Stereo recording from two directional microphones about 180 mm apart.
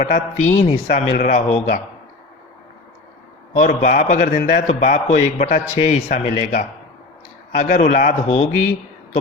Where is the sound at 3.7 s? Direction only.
45° left (ahead or behind).